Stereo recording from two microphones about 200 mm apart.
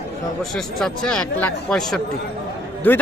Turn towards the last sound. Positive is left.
turn(degrees=10)  # may be behind; listen again after turning